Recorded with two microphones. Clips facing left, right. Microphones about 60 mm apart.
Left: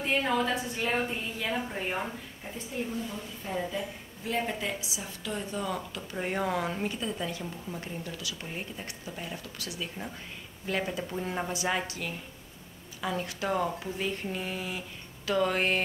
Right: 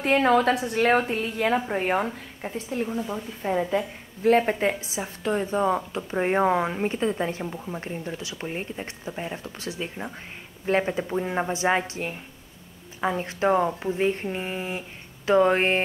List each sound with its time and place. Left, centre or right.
0.0 s a woman's voice: right